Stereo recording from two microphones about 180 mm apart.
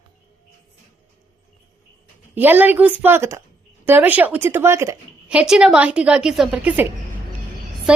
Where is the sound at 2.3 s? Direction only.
10° right (ahead or behind).